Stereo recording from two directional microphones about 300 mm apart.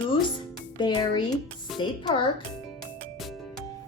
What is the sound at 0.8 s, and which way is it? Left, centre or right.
Speech, centre.